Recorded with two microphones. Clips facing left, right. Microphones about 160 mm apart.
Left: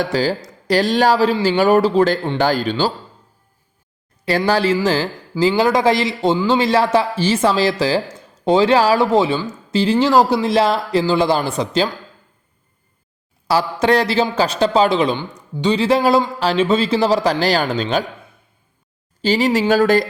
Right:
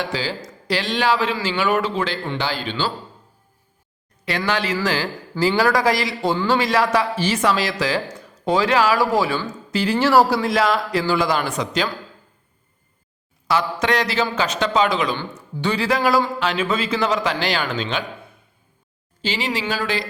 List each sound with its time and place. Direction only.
0.0 s speech: 45° left (ahead or behind)
4.3 s speech: 35° left (ahead or behind)
13.5 s speech: 30° left (ahead or behind)
15.2 s speech: 15° left (ahead or behind); by 18.0 s 40° left (ahead or behind)
19.2 s speech: 40° left (ahead or behind)